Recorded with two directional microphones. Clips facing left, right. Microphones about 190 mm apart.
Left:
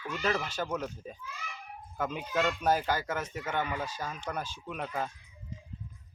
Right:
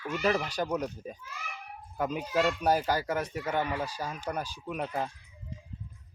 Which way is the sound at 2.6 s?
10° right (ahead or behind).